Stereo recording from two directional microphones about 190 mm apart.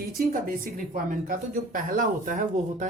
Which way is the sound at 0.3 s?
45° right (ahead or behind).